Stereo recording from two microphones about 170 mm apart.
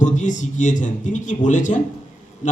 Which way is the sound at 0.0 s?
45° left (ahead or behind).